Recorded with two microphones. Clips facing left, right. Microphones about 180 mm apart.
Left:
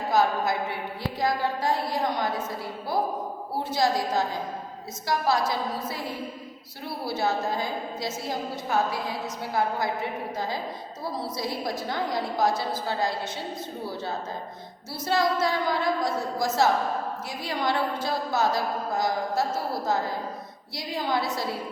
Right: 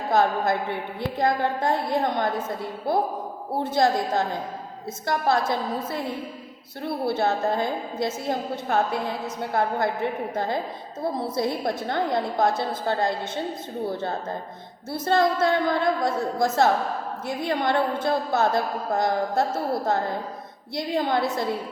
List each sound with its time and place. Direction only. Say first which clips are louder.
0.1 s a woman's voice: right 2 dB; 55° right (ahead or behind)
3.6 s a woman's voice: right 3 dB; 55° right (ahead or behind)
20.7 s a woman's voice: right 4 dB; 55° right (ahead or behind)